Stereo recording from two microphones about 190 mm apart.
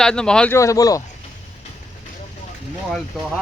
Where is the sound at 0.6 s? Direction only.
15° left (ahead or behind).